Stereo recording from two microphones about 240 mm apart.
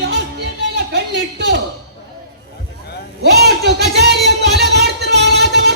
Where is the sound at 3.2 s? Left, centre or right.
Right.